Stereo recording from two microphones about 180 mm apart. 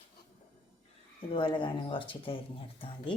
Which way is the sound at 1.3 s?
30° left (ahead or behind).